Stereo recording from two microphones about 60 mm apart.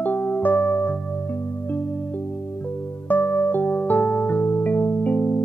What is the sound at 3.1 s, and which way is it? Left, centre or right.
Music, left.